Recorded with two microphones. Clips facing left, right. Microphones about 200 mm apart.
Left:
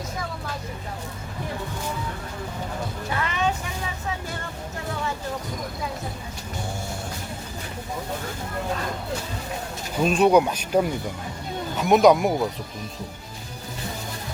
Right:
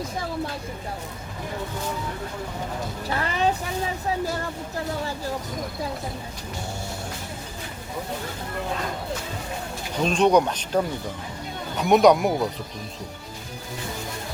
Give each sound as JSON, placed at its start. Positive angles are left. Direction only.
{"t": 3.2, "sound": "vehicle", "side_deg": -35}
{"t": 10.0, "sound": "speech", "side_deg": 5}